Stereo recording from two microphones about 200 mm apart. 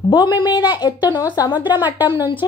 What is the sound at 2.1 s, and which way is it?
Speech, 20° left (ahead or behind).